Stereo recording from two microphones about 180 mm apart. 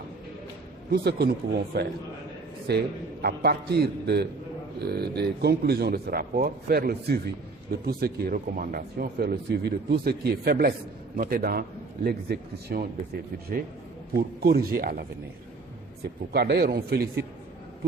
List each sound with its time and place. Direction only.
0.9 s a man's voice: 65° right (ahead or behind)
14.1 s speech: 60° right (ahead or behind)
16.3 s speech: 65° right (ahead or behind)